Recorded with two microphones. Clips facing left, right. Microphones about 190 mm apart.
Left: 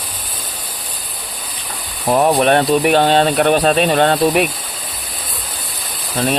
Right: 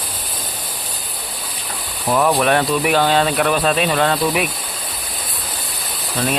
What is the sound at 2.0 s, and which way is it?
Speech, 30° left (ahead or behind).